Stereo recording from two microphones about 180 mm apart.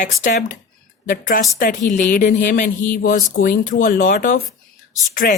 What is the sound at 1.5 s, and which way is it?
Speech, 50° left (ahead or behind).